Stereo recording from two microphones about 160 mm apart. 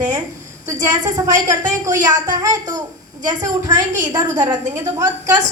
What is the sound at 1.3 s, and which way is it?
Speech, 50° right (ahead or behind).